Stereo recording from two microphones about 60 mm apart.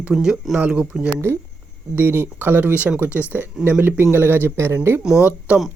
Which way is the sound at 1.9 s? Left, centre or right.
Right.